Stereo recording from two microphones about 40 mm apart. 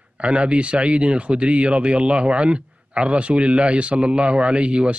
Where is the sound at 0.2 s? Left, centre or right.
Right.